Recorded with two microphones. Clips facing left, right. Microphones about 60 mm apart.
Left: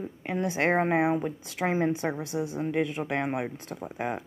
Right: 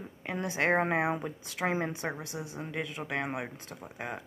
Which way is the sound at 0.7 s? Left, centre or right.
Centre.